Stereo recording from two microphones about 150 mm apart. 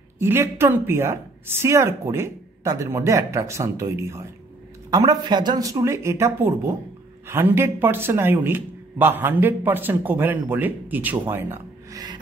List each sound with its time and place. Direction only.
0.2 s a man's voice: 15° right (ahead or behind)